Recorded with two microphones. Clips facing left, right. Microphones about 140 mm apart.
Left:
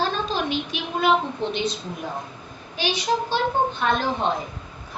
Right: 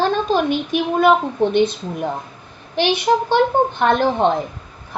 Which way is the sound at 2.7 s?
60° right (ahead or behind).